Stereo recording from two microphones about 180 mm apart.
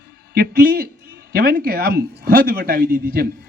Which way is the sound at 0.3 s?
60° right (ahead or behind).